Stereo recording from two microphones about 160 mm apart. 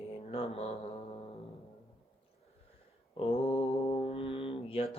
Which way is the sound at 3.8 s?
40° left (ahead or behind).